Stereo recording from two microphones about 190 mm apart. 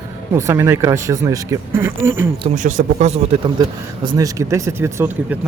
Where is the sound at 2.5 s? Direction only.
40° right (ahead or behind).